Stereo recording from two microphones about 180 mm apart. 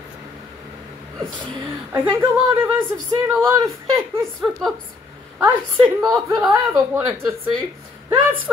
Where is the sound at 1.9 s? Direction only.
10° right (ahead or behind).